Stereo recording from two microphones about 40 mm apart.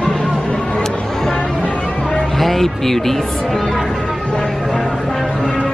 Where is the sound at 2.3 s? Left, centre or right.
Centre.